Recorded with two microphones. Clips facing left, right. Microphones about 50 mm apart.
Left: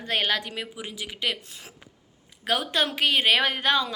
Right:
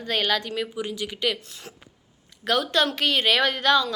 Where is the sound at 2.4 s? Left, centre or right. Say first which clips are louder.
Right 3 dB; centre.